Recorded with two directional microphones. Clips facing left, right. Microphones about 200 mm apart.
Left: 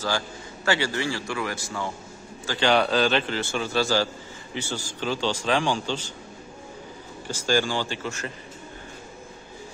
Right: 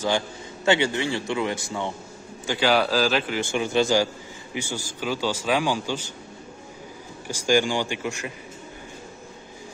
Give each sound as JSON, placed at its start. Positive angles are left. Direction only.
{"t": 0.7, "sound": "a man's voice", "side_deg": -20}
{"t": 2.7, "sound": "speech", "side_deg": 0}
{"t": 3.3, "sound": "a man's voice", "side_deg": -15}
{"t": 7.2, "sound": "a man's voice", "side_deg": -15}